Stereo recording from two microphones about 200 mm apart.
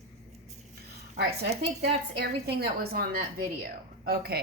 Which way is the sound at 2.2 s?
50° right (ahead or behind).